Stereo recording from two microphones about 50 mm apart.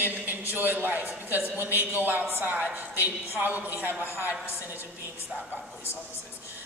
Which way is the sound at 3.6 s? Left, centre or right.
Right.